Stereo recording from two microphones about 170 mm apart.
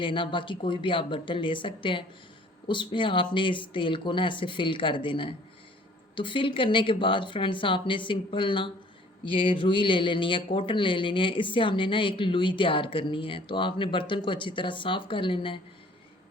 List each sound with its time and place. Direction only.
0.0 s speech: 30° left (ahead or behind)